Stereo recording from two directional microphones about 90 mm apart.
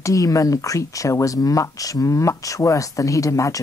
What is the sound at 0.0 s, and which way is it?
A woman's voice, 40° left (ahead or behind).